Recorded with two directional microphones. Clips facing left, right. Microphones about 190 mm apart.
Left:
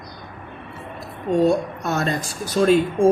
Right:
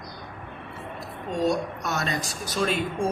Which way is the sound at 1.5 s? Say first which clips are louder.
Left 6 dB; 40° left (ahead or behind).